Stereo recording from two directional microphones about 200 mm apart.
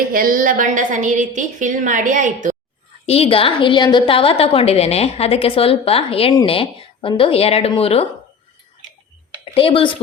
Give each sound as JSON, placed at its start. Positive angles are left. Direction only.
{"t": 0.1, "sound": "a woman's voice", "side_deg": -45}
{"t": 3.1, "sound": "a woman's voice", "side_deg": 30}
{"t": 9.4, "sound": "speech", "side_deg": 25}